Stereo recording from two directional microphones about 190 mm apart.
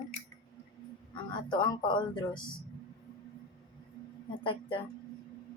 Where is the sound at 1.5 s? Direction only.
25° left (ahead or behind).